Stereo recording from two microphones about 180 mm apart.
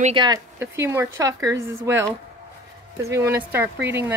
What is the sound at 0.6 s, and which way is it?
Speech, 15° right (ahead or behind).